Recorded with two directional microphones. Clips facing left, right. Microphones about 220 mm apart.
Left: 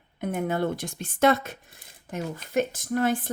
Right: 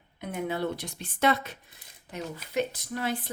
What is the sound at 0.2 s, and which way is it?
Speech, 50° left (ahead or behind).